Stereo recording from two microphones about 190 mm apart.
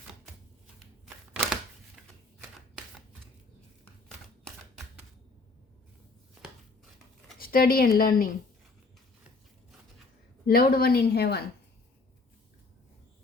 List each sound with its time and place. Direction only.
2.0 s shuffling cards: 5° right (ahead or behind)
7.3 s speech: 50° left (ahead or behind)
10.4 s speech: 50° left (ahead or behind)